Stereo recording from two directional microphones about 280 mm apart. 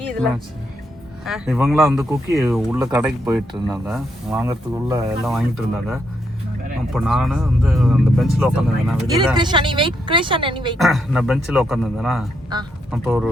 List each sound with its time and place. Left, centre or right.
1.2 s speech: centre
5.0 s speech: centre
9.3 s speech: centre
10.8 s speech: centre